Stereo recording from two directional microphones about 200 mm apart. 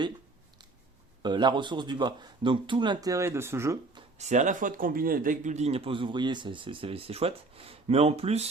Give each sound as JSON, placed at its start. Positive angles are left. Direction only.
{"t": 1.2, "sound": "speech", "side_deg": -20}
{"t": 4.2, "sound": "speech", "side_deg": -35}